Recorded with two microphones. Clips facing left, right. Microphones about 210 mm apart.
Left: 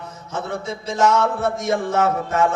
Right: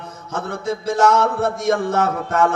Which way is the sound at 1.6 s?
65° right (ahead or behind).